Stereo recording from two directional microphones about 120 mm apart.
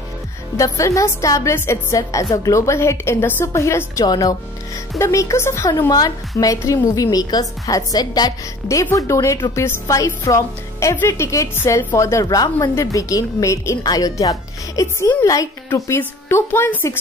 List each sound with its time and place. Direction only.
0.6 s a woman's voice: 25° left (ahead or behind)